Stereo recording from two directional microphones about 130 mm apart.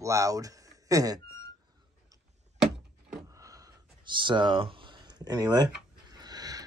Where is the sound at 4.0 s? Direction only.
40° right (ahead or behind).